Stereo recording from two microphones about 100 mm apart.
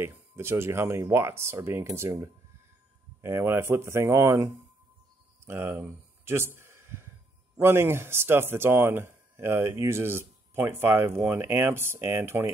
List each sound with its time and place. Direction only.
0.0 s speech: 25° right (ahead or behind)
5.4 s a sound: 20° right (ahead or behind)
7.6 s speech: 25° right (ahead or behind)